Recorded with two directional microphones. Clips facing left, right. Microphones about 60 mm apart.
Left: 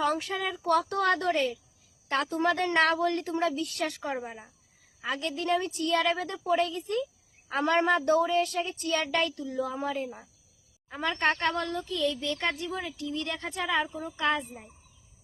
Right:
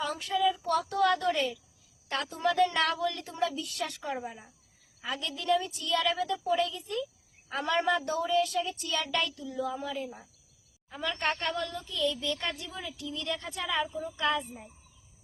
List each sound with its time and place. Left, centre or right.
0.0 s a woman's voice: left